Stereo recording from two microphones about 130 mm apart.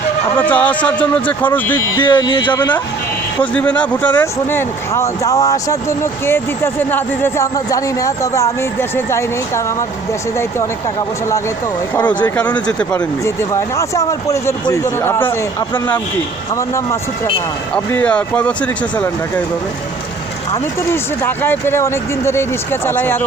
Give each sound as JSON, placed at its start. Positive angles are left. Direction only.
{"t": 0.3, "sound": "speech", "side_deg": 10}
{"t": 2.0, "sound": "speech", "side_deg": 35}
{"t": 3.4, "sound": "speech", "side_deg": 10}
{"t": 11.9, "sound": "speech", "side_deg": 15}
{"t": 12.9, "sound": "speech", "side_deg": 25}
{"t": 17.9, "sound": "speech", "side_deg": 10}
{"t": 20.9, "sound": "speech", "side_deg": 15}